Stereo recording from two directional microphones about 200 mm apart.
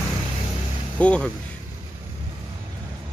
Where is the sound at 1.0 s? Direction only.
5° left (ahead or behind).